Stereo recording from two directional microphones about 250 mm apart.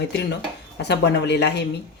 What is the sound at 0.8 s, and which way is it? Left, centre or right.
Speech, left.